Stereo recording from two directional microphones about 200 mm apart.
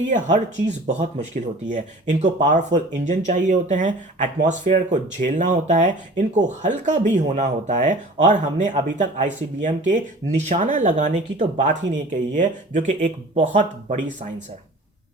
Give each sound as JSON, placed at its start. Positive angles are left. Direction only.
{"t": 0.3, "sound": "speech", "side_deg": -35}